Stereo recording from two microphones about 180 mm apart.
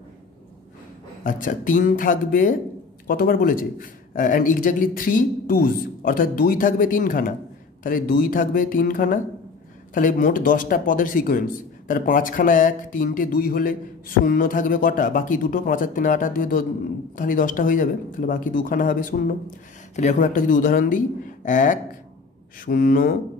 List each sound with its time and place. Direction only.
1.2 s speech: 50° left (ahead or behind)